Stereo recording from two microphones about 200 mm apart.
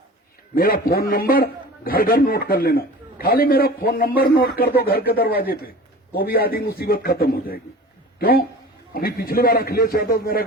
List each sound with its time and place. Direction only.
0.5 s a man's voice: 45° left (ahead or behind)